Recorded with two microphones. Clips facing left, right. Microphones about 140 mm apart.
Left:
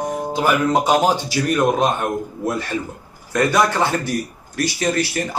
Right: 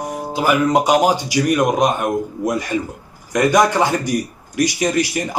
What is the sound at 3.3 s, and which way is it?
Speech, 15° right (ahead or behind).